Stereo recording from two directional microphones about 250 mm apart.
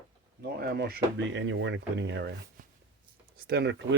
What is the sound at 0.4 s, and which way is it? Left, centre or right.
Speech, right.